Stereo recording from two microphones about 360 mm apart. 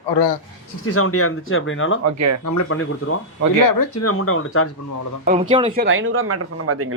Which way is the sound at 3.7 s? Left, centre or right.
Left.